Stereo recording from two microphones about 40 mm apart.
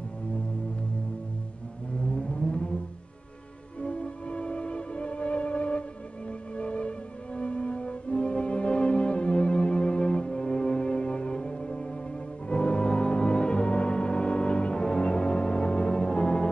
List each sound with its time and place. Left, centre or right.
2.2 s vehicle: left
3.8 s music: left